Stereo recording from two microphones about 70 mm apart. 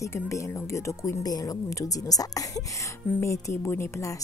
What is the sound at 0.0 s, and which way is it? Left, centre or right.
A woman's voice, left.